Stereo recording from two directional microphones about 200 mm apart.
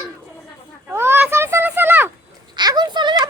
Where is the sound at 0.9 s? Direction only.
10° right (ahead or behind).